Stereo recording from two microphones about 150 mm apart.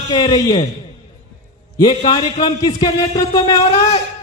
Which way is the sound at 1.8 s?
30° left (ahead or behind).